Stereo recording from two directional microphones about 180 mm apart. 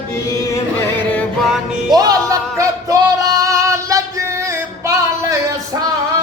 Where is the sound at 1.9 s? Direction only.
20° right (ahead or behind).